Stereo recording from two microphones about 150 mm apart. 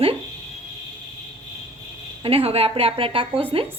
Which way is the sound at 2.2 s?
40° right (ahead or behind).